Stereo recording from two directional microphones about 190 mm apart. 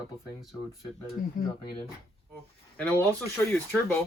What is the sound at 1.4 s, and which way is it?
Speech, 45° left (ahead or behind).